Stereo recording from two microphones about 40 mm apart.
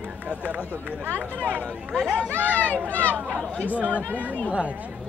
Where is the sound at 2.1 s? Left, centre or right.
Left.